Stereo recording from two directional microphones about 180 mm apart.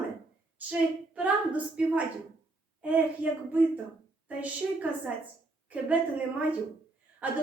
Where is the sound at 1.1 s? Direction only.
5° right (ahead or behind).